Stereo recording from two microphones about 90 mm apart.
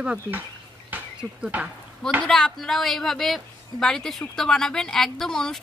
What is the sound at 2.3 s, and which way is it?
A woman's voice, 5° left (ahead or behind).